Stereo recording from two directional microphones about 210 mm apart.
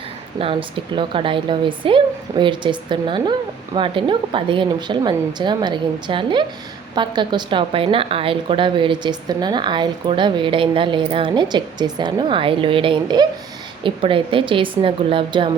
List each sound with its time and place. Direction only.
0.9 s a woman's voice: 25° right (ahead or behind)